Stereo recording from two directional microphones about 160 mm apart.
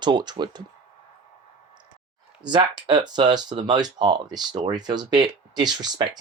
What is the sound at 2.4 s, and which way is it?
Speech, 30° right (ahead or behind).